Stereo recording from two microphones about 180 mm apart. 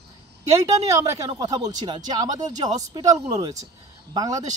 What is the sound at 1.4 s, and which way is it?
Speech, 20° right (ahead or behind).